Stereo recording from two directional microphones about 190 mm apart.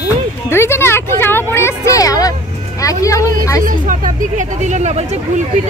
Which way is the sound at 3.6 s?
45° right (ahead or behind).